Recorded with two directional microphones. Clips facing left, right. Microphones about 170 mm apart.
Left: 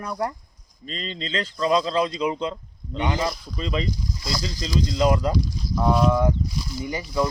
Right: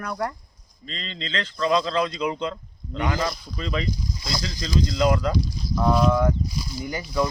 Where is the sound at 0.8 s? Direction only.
40° left (ahead or behind).